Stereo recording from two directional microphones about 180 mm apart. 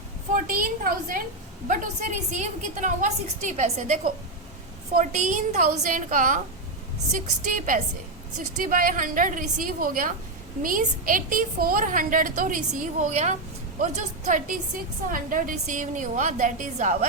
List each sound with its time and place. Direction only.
0.3 s a woman's voice: 50° right (ahead or behind)